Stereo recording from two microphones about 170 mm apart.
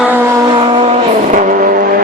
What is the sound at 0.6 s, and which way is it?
Vehicle, 30° right (ahead or behind).